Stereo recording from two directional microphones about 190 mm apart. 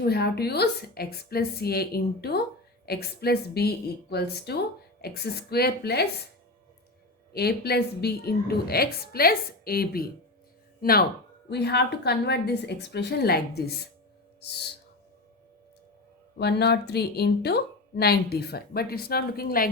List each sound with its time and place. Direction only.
0.0 s speech: 55° left (ahead or behind)
7.3 s speech: 55° left (ahead or behind)
16.4 s speech: 60° left (ahead or behind)